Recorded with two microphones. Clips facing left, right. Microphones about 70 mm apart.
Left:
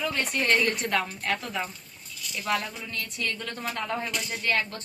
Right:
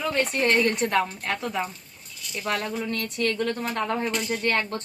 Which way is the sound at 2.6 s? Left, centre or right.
Right.